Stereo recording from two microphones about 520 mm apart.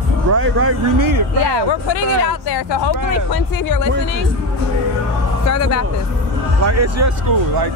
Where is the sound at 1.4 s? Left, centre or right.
Left.